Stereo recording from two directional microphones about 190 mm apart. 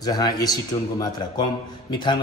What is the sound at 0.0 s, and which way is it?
A man's voice, 20° left (ahead or behind).